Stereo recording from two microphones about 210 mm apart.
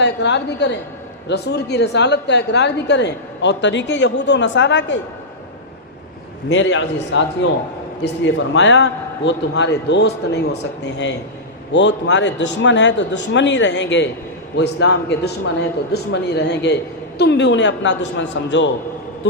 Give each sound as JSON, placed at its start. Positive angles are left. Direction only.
{"t": 0.0, "sound": "a woman's voice", "side_deg": 55}
{"t": 6.5, "sound": "a woman's voice", "side_deg": 60}